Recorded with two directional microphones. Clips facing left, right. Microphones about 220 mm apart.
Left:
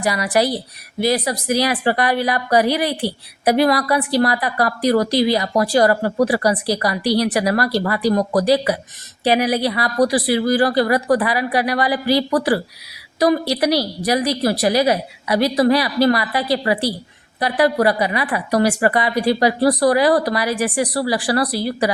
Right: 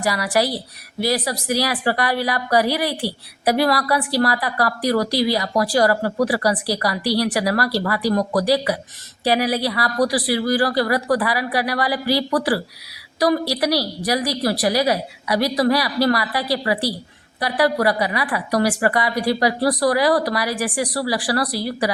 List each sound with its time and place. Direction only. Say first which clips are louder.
0.0 s a woman's voice: left 2 dB; 20° left (ahead or behind)